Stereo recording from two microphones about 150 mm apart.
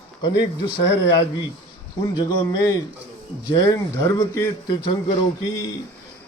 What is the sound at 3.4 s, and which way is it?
A man's voice, 25° left (ahead or behind).